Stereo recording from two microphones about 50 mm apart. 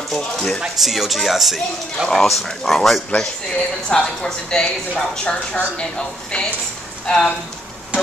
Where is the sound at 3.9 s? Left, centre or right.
Centre.